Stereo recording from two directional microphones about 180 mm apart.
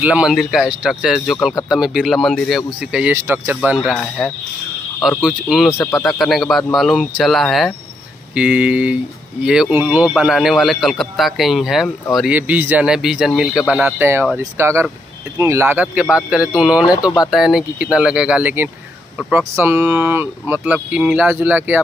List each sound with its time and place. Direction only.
0.0 s speech: 5° right (ahead or behind)
5.2 s speech: centre (ahead or behind)
5.7 s speech: 15° left (ahead or behind)
6.0 s speech: centre (ahead or behind)